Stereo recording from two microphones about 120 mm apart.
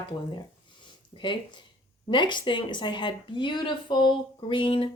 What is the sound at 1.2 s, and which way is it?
A woman's voice, 40° left (ahead or behind).